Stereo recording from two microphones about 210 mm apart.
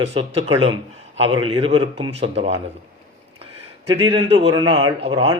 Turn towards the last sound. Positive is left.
turn(degrees=-25)  # may be behind; listen again after turning